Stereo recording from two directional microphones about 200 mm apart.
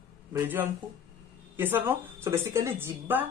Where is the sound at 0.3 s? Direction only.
10° right (ahead or behind).